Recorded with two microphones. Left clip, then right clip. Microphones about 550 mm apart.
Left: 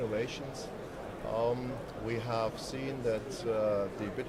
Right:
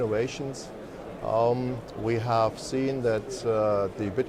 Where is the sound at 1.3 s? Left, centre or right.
Right.